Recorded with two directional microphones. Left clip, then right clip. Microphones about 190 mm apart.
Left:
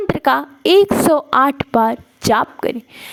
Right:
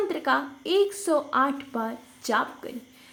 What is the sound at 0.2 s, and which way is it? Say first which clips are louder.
A woman's voice: left 10 dB; 55° left (ahead or behind).